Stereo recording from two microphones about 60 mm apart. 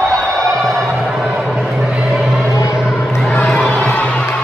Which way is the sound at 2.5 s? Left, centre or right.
Left.